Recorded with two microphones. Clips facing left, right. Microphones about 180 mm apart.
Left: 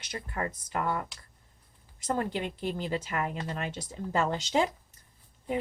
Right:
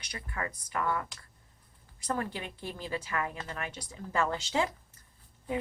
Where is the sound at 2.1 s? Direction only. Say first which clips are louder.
Left 4 dB; 20° left (ahead or behind).